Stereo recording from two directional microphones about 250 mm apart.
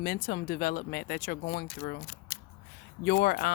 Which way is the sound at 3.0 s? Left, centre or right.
Left.